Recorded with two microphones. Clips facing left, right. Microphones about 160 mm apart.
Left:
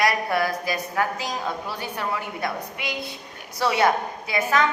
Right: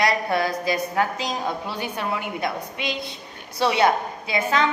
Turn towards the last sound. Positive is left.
turn(degrees=-25)  # may be behind; listen again after turning